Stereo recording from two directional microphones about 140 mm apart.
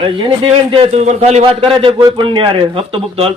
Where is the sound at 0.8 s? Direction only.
55° right (ahead or behind).